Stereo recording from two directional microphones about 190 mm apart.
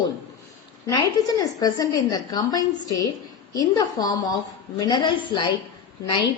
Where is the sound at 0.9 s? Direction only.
20° left (ahead or behind).